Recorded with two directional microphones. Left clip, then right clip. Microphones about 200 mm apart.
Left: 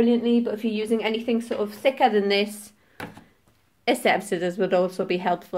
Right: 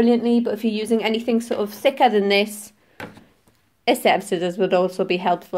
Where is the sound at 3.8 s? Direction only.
15° right (ahead or behind).